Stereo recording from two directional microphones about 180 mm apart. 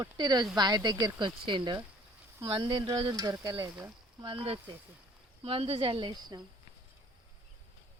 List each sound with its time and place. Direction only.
0.0 s speech: 20° right (ahead or behind)
3.7 s speech: 5° right (ahead or behind)
4.2 s speech: 25° right (ahead or behind)